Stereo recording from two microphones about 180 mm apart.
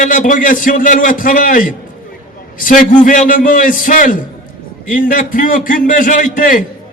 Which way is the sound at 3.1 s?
50° left (ahead or behind).